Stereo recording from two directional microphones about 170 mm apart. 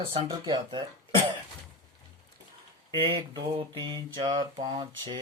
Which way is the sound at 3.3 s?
25° right (ahead or behind).